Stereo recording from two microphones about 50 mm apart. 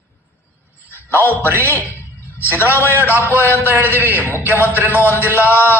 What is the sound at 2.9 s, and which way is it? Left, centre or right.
Speech, right.